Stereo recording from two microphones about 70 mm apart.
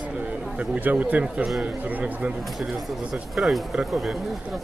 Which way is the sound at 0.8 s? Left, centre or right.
Right.